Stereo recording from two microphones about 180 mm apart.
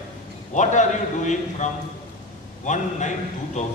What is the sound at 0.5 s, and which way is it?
A man's voice, 45° left (ahead or behind).